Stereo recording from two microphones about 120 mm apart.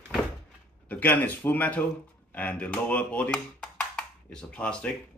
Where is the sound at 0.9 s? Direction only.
15° left (ahead or behind).